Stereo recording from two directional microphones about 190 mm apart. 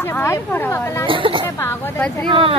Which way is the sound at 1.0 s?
25° right (ahead or behind).